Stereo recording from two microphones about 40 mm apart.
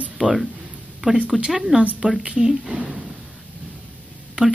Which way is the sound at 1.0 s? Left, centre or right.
Right.